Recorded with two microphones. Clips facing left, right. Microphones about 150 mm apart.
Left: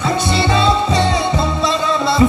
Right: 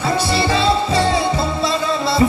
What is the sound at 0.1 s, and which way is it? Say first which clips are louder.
Music: left 1 dB; 20° left (ahead or behind).